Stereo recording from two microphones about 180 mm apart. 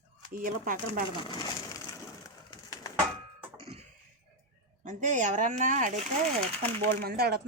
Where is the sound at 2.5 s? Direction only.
20° left (ahead or behind).